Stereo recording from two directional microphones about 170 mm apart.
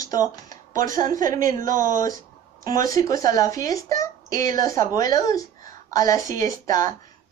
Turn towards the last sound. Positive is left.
turn(degrees=20)  # may be behind; listen again after turning